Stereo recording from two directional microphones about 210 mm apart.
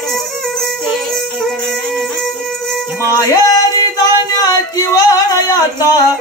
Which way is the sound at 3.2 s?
15° left (ahead or behind).